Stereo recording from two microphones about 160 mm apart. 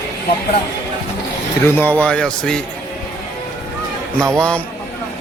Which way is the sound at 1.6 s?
10° left (ahead or behind).